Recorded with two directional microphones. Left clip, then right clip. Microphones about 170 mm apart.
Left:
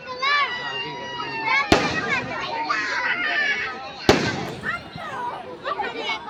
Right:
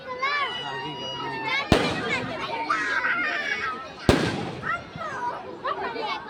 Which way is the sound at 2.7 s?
50° left (ahead or behind).